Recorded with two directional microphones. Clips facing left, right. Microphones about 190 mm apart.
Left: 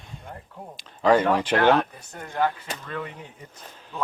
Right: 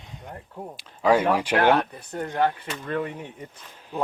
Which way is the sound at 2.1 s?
40° right (ahead or behind).